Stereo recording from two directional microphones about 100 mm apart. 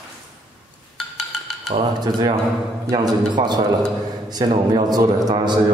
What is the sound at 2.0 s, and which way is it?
A man's voice, 45° right (ahead or behind).